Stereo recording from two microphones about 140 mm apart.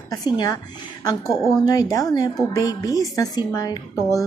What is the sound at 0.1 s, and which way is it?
Speech, 30° left (ahead or behind).